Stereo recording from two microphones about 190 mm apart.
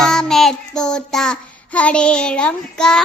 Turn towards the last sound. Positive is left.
turn(degrees=5)  # may be behind; listen again after turning